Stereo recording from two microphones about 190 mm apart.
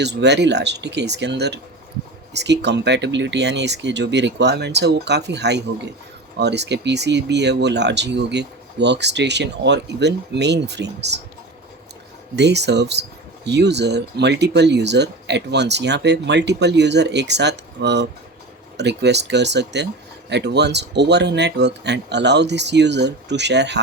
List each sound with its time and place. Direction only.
0.0 s speech: 60° right (ahead or behind)
12.4 s speech: 65° right (ahead or behind)